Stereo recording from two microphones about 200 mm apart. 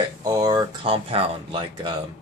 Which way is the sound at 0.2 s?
20° right (ahead or behind).